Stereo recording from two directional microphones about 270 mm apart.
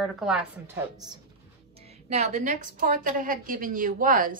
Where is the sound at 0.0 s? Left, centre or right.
Centre.